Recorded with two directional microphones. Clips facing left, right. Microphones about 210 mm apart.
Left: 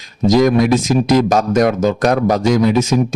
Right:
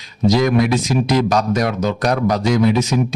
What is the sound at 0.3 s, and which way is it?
Speech, 45° left (ahead or behind).